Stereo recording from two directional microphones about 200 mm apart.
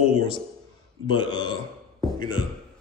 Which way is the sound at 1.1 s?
25° left (ahead or behind).